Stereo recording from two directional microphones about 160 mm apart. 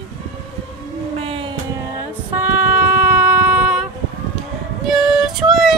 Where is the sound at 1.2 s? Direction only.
35° right (ahead or behind).